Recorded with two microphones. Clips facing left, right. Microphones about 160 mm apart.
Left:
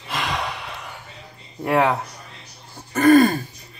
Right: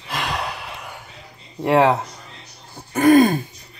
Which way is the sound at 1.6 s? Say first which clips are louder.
Right 3 dB; 25° right (ahead or behind).